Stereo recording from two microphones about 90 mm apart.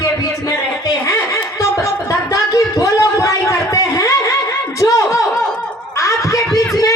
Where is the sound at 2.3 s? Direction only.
40° left (ahead or behind).